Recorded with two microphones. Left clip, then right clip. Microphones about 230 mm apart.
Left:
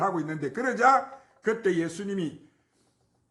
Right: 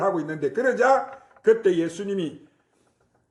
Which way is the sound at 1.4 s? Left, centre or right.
Left.